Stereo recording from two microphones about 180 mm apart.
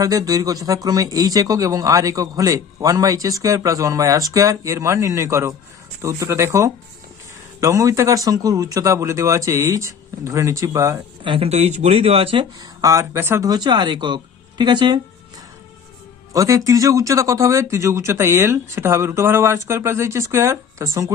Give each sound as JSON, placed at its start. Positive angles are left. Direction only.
{"t": 0.0, "sound": "a man's voice", "side_deg": -20}
{"t": 16.3, "sound": "speech", "side_deg": -20}